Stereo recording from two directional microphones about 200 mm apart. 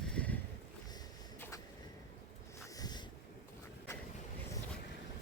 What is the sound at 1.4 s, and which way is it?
Vehicle, 10° left (ahead or behind).